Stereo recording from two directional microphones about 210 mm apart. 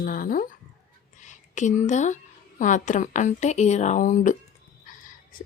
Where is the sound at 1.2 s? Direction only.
35° left (ahead or behind).